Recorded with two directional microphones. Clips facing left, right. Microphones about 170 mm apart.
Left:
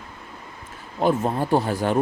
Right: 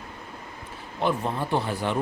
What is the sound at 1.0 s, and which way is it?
Speech, 40° left (ahead or behind).